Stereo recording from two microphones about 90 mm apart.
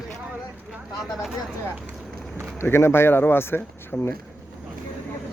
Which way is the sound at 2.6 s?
30° left (ahead or behind).